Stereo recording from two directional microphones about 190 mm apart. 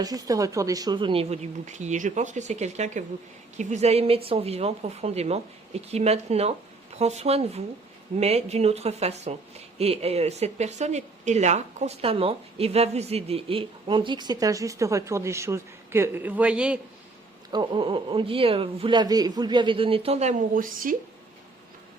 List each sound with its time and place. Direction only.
0.0 s a woman's voice: 20° right (ahead or behind)
17.5 s a woman's voice: 25° right (ahead or behind); by 20.9 s 45° right (ahead or behind)